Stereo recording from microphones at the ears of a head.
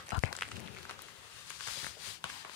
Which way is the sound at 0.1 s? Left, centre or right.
Left.